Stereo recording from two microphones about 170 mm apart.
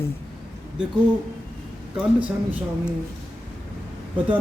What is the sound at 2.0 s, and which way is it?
Speech, 10° right (ahead or behind).